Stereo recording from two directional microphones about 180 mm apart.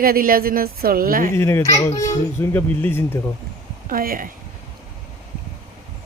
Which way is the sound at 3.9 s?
50° right (ahead or behind).